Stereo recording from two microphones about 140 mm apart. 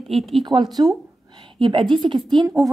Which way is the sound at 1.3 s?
35° right (ahead or behind).